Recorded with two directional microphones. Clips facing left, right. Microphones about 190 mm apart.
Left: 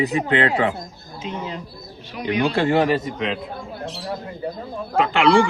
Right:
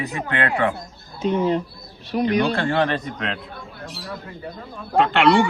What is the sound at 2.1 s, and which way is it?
Speech, 45° right (ahead or behind).